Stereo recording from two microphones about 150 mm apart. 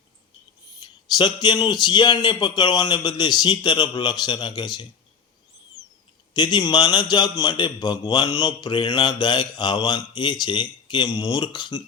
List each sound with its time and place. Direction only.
1.1 s a man's voice: 30° left (ahead or behind)
6.3 s a man's voice: 30° left (ahead or behind)